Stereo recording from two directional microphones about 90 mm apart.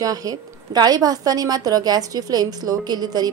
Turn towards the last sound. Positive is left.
turn(degrees=-50)  # may be behind; listen again after turning